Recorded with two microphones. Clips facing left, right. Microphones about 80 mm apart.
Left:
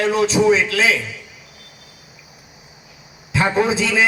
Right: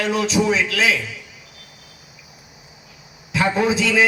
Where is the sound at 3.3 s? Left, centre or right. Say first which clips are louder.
Left 1 dB; left.